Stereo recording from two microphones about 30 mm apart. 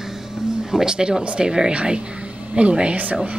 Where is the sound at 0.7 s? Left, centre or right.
Right.